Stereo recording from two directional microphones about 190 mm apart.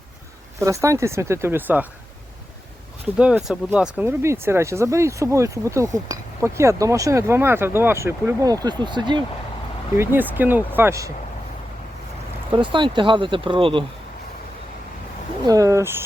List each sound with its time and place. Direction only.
0.6 s speech: 15° right (ahead or behind)
3.2 s speech: 5° right (ahead or behind); by 9.2 s 25° right (ahead or behind)
10.0 s speech: 10° right (ahead or behind)
12.5 s speech: 25° right (ahead or behind)
15.4 s speech: 15° right (ahead or behind)